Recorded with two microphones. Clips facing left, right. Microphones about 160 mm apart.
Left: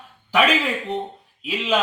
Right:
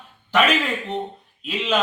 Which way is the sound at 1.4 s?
5° left (ahead or behind).